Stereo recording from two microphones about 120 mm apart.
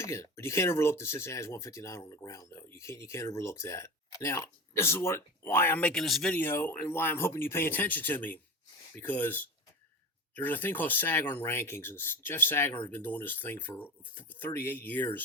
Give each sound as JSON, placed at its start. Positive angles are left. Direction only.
{"t": 0.0, "sound": "speech", "side_deg": 25}
{"t": 6.3, "sound": "speech", "side_deg": 20}